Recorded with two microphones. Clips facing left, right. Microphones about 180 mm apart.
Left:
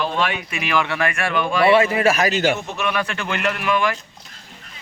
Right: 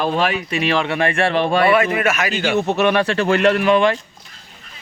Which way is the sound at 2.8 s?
35° right (ahead or behind).